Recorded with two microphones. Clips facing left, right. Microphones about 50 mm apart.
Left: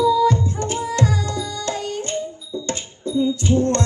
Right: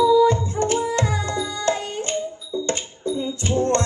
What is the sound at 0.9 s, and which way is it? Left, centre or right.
Music, right.